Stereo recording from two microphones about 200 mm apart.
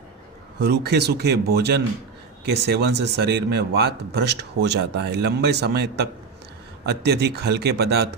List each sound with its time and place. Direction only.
0.6 s a man's voice: 55° right (ahead or behind)